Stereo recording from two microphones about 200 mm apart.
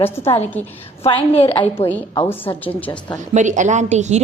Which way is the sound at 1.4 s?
30° left (ahead or behind).